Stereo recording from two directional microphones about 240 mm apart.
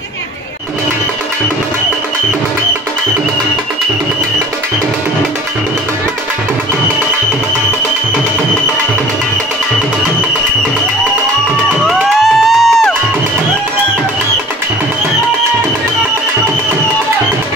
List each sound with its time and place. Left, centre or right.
11.9 s music: centre